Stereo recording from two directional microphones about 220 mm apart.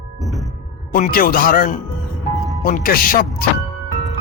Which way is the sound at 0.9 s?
40° left (ahead or behind).